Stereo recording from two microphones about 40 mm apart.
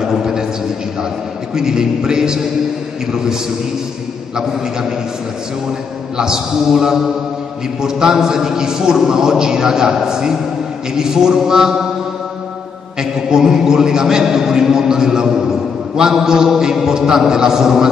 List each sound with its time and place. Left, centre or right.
0.0 s a sound: centre
1.5 s a man's voice: centre
6.1 s a man's voice: centre
13.0 s a man's voice: centre